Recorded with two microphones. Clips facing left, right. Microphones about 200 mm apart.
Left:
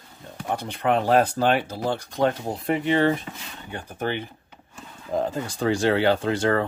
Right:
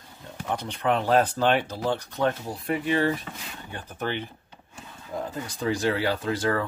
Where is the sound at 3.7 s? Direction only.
15° left (ahead or behind).